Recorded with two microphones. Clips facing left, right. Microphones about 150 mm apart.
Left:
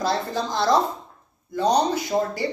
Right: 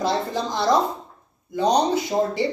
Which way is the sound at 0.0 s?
15° right (ahead or behind).